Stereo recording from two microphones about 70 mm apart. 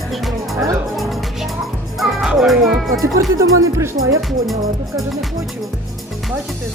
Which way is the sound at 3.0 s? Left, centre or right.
Right.